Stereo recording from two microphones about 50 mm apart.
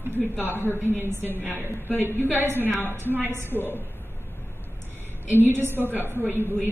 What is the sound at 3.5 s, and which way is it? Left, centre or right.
Speech, left.